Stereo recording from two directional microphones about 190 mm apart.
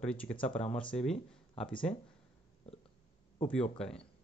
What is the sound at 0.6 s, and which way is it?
Speech, 35° left (ahead or behind).